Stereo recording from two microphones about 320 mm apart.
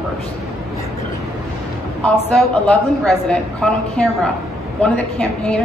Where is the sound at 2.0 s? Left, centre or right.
Centre.